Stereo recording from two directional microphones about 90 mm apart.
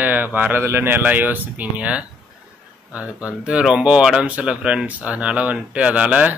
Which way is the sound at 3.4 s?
10° right (ahead or behind).